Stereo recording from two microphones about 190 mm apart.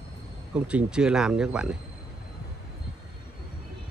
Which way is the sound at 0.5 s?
5° right (ahead or behind).